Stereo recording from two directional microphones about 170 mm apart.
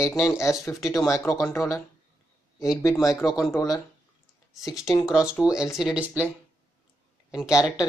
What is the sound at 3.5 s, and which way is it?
Speech, 20° left (ahead or behind).